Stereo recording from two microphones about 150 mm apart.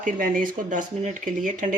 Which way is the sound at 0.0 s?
65° right (ahead or behind).